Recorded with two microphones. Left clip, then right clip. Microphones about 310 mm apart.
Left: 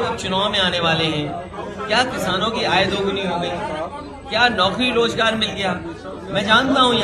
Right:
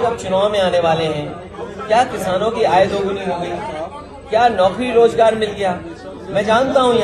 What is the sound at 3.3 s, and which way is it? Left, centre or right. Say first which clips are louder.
Speech: right 1 dB; left.